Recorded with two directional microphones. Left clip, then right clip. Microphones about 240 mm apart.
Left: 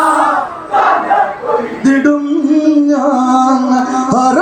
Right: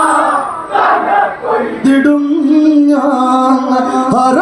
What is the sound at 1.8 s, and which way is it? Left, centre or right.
Music, right.